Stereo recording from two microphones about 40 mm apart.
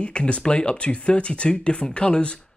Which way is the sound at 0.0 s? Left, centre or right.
Left.